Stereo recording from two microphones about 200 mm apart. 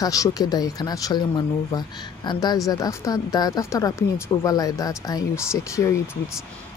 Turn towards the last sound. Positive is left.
turn(degrees=15)  # may be behind; listen again after turning